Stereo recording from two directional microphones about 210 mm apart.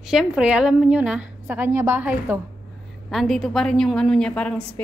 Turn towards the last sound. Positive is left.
turn(degrees=5)  # may be behind; listen again after turning